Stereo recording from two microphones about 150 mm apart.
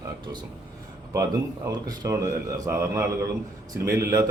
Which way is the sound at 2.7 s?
15° right (ahead or behind).